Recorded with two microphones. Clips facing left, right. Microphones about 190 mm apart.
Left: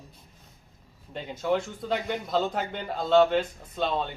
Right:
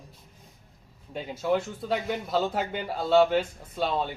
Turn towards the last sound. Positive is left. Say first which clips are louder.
# even
turn(degrees=-5)  # may be behind; listen again after turning